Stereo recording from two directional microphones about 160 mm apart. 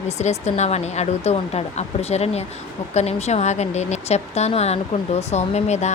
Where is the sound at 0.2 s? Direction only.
45° left (ahead or behind).